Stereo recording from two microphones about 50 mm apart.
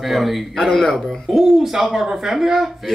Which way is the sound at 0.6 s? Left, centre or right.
Centre.